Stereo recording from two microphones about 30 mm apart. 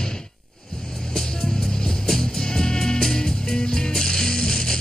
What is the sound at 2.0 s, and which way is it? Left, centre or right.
Music, centre.